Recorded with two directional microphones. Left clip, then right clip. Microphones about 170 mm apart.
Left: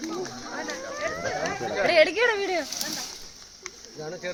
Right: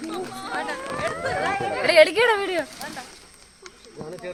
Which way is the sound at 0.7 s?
20° right (ahead or behind).